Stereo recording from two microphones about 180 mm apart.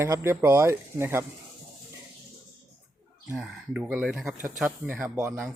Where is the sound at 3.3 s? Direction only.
5° right (ahead or behind).